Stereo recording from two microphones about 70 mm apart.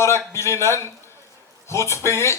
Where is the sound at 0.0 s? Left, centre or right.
Left.